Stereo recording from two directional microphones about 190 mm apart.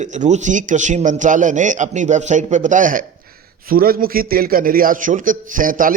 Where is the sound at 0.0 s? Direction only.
40° right (ahead or behind).